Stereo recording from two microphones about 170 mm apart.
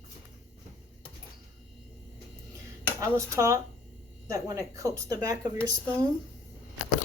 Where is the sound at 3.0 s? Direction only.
15° right (ahead or behind).